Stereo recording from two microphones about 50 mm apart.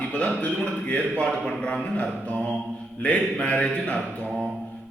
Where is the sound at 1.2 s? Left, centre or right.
Left.